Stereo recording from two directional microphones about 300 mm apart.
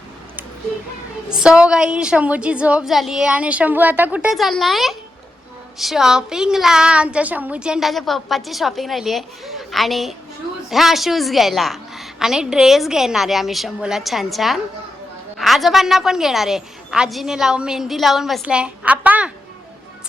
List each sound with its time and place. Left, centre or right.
1.3 s a woman's voice: centre